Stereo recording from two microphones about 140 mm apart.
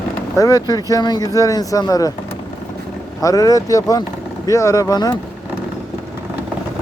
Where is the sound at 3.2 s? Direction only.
25° left (ahead or behind).